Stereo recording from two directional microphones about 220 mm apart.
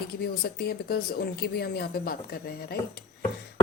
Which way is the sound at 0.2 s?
45° left (ahead or behind).